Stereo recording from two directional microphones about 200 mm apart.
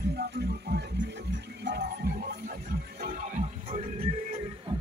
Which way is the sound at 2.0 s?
50° right (ahead or behind).